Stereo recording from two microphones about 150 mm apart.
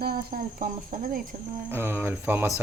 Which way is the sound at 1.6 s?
15° right (ahead or behind).